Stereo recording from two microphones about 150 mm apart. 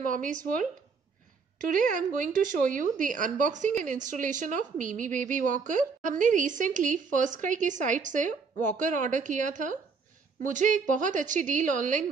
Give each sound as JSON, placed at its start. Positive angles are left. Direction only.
{"t": 0.0, "sound": "speech", "side_deg": -60}
{"t": 1.7, "sound": "speech", "side_deg": -60}